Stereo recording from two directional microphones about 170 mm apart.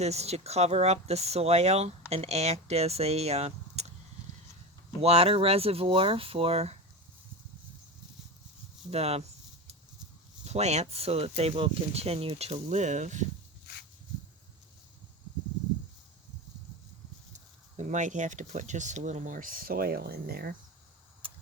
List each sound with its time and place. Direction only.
0.0 s speech: 40° right (ahead or behind)
4.9 s speech: 35° right (ahead or behind)
8.9 s speech: 40° right (ahead or behind)
10.4 s speech: 40° right (ahead or behind)
17.3 s speech: 45° right (ahead or behind); by 20.5 s 60° right (ahead or behind)